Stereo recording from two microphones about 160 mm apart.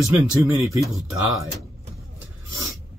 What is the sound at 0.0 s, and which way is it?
Speech, 20° right (ahead or behind).